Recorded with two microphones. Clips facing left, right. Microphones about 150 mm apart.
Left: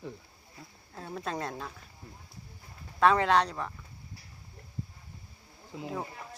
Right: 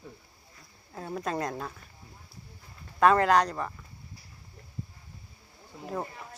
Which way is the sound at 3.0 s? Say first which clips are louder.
Right 2 dB; 5° right (ahead or behind).